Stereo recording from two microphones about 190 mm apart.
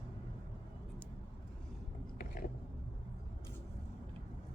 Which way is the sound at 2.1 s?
50° left (ahead or behind).